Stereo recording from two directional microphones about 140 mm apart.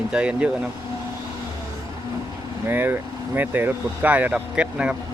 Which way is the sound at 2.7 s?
15° right (ahead or behind).